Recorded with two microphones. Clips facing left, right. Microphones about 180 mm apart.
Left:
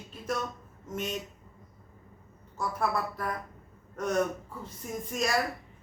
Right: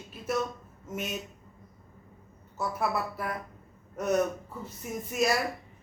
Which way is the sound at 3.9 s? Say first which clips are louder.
Right 2 dB; 10° right (ahead or behind).